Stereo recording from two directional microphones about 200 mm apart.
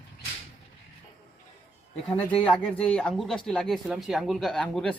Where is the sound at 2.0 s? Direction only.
25° left (ahead or behind).